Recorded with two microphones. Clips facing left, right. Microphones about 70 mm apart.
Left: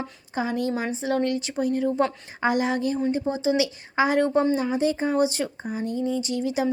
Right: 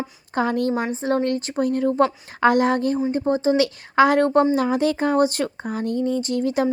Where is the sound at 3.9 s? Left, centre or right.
Right.